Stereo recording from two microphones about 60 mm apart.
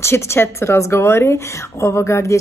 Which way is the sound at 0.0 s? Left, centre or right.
Left.